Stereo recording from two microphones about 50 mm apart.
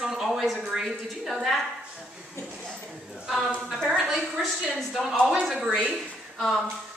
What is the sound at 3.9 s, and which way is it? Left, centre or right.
A woman's voice, centre.